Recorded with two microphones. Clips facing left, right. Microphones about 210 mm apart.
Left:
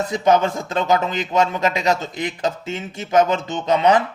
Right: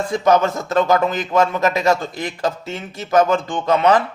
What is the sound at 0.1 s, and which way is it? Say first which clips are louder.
Speech: right 2 dB; 20° left (ahead or behind).